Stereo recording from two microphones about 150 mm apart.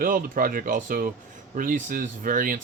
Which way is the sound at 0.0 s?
70° right (ahead or behind).